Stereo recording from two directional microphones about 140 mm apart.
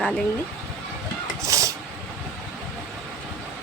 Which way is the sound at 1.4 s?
25° right (ahead or behind).